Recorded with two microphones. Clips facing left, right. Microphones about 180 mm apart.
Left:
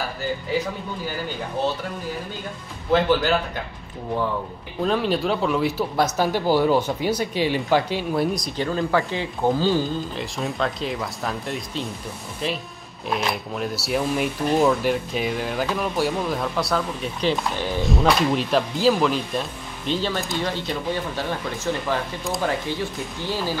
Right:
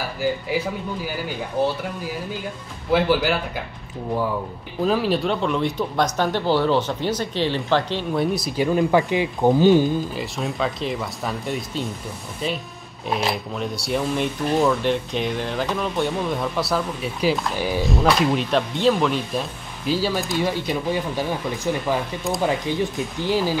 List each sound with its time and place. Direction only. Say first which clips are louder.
2.9 s speech: even; 10° right (ahead or behind)
4.8 s speech: right 1 dB; centre (ahead or behind); by 9.8 s 20° right (ahead or behind)
10.1 s speech: right 1 dB; centre (ahead or behind)